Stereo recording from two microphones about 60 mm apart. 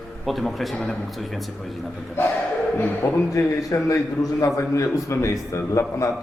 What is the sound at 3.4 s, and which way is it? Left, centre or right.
A man's voice, left.